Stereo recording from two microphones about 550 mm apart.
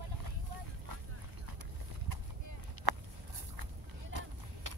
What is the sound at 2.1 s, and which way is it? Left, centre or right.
Clip-clop, right.